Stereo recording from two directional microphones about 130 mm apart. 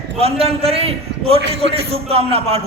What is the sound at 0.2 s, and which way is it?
A man's voice, 50° right (ahead or behind).